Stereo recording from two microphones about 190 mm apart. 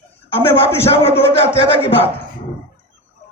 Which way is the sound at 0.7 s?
15° left (ahead or behind).